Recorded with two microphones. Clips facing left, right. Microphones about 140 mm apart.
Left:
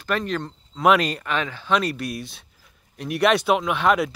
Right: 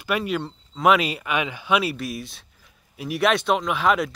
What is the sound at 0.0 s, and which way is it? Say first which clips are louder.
Speech: right 1 dB; 10° right (ahead or behind).